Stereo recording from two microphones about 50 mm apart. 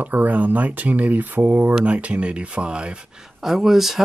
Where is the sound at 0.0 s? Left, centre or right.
Right.